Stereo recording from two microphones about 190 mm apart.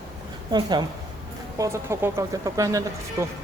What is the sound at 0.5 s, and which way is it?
Speech, 20° right (ahead or behind).